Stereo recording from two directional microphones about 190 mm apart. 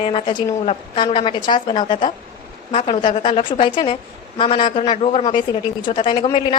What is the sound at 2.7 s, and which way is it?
A woman's voice, 35° left (ahead or behind).